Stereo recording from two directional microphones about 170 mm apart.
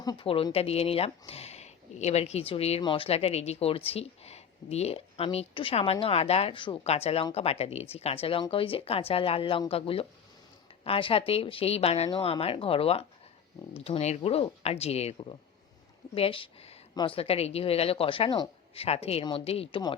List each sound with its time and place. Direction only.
0.0 s speech: 25° left (ahead or behind)